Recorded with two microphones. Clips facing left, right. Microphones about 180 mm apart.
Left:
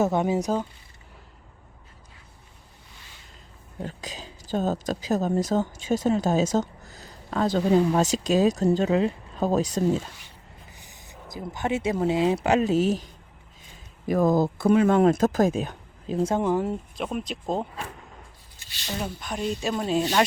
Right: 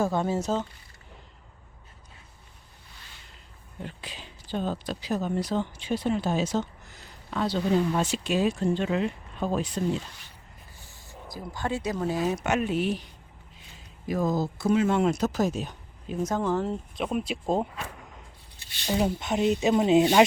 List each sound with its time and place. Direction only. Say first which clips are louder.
0.0 s speech: left 3 dB; 20° left (ahead or behind)
3.8 s speech: left 4 dB; 40° left (ahead or behind)
10.7 s speech: left 1 dB; 20° left (ahead or behind); by 13.1 s 40° left (ahead or behind)
14.1 s speech: left 6 dB; 55° left (ahead or behind)
16.0 s speech: left 4 dB; 30° left (ahead or behind); by 16.7 s 15° left (ahead or behind)
17.0 s speech: right 5 dB; centre (ahead or behind)
18.9 s speech: right 6 dB; 20° right (ahead or behind)